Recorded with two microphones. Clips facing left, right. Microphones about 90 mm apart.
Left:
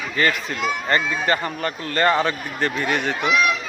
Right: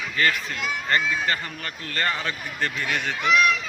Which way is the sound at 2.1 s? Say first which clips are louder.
Left 9 dB; 60° left (ahead or behind).